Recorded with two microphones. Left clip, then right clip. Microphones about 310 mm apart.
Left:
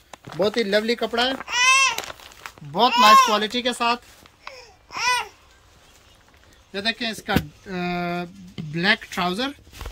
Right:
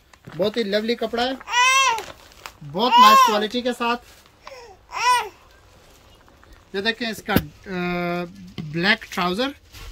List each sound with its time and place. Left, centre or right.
0.4 s speech: centre
1.5 s babbling: right
2.4 s a sound: centre
3.3 s speech: centre
4.6 s babbling: right
6.7 s speech: centre